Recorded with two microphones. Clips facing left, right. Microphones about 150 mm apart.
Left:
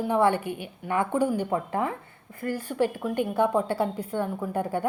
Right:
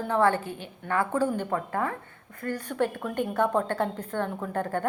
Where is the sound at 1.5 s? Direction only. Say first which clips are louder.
Left 2 dB; 20° left (ahead or behind).